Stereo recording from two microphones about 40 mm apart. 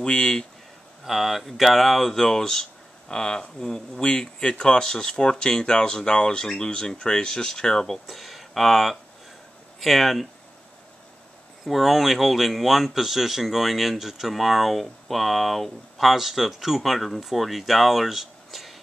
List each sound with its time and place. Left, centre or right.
0.0 s speech: centre
1.0 s speech: centre
11.6 s speech: centre